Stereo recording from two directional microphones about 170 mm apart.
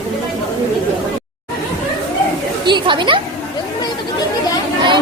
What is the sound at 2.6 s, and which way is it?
Speech, 25° right (ahead or behind).